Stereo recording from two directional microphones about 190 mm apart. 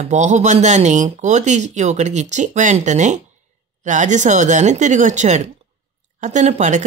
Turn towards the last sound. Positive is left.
turn(degrees=-40)  # may be behind; listen again after turning